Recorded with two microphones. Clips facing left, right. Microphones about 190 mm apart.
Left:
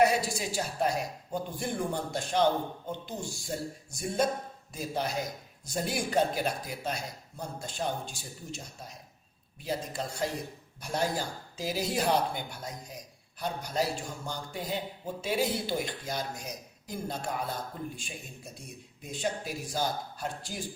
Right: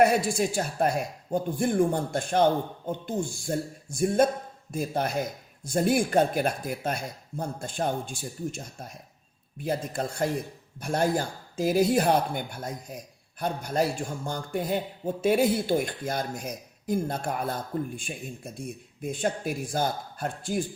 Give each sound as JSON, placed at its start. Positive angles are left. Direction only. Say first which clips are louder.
{"t": 0.0, "sound": "a man's voice", "louder": "right 4 dB", "side_deg": -55}